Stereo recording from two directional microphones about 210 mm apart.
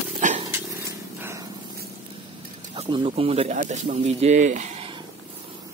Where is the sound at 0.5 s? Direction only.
10° right (ahead or behind).